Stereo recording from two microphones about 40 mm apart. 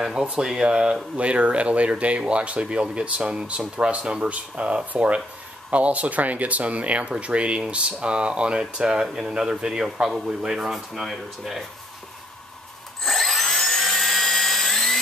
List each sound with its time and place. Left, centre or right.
0.0 s a man's voice: centre
10.7 s speech: centre
13.0 s helicopter: centre